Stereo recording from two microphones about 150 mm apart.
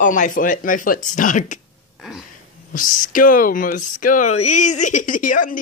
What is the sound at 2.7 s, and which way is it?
Speech, 65° left (ahead or behind).